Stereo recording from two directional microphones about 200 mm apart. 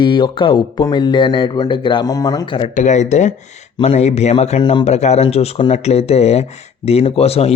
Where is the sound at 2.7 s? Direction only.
35° left (ahead or behind).